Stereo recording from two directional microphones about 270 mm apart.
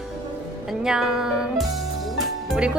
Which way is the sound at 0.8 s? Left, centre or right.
Centre.